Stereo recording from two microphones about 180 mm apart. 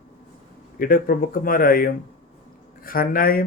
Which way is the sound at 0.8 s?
50° left (ahead or behind).